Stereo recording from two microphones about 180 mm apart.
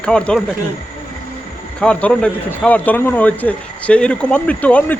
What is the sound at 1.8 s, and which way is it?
A man's voice, 5° left (ahead or behind).